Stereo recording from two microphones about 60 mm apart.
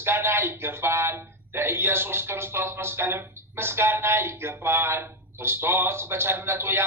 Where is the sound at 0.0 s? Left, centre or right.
Right.